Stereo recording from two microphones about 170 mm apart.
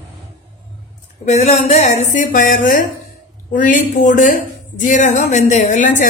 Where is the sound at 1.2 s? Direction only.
40° left (ahead or behind).